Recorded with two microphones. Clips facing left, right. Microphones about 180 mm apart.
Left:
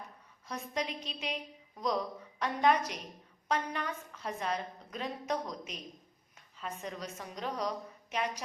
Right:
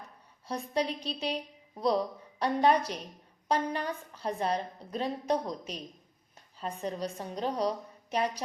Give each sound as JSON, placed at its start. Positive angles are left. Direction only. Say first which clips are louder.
{"t": 0.4, "sound": "a woman's voice", "louder": "right 6 dB", "side_deg": -30}